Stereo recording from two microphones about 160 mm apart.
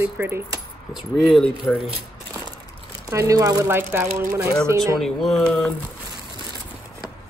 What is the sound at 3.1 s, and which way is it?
A woman's voice, 20° right (ahead or behind).